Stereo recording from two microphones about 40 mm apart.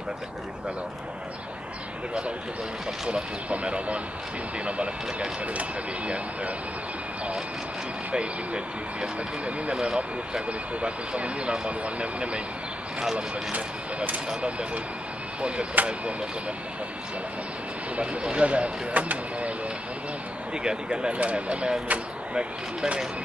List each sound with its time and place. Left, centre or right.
3.1 s speech: right
8.1 s speech: right
13.5 s speech: right
15.7 s speech: right
17.9 s speech: right
20.5 s speech: right
21.2 s speech: right